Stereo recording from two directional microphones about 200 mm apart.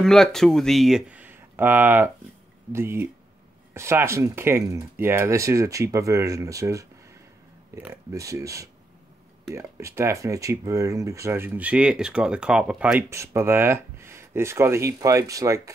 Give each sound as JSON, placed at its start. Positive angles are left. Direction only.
{"t": 0.0, "sound": "speech", "side_deg": 0}